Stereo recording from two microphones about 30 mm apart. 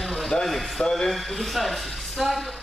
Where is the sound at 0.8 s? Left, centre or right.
Centre.